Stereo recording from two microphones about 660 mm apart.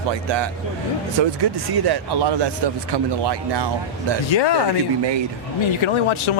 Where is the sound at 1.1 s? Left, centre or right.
Right.